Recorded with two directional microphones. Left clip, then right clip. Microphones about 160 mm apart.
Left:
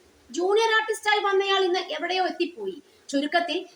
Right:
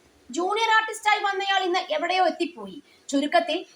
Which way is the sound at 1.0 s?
35° right (ahead or behind).